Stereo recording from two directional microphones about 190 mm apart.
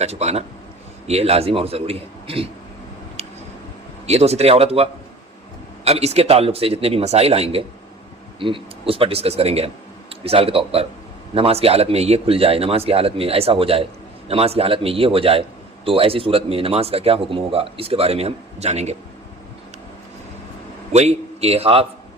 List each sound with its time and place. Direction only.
0.0 s a man's voice: 35° right (ahead or behind)
4.0 s a man's voice: 35° right (ahead or behind)
20.9 s a man's voice: 35° right (ahead or behind)